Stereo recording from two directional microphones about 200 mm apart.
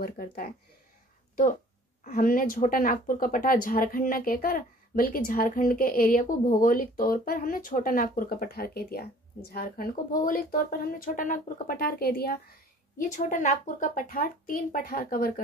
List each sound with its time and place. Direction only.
0.0 s speech: 50° left (ahead or behind)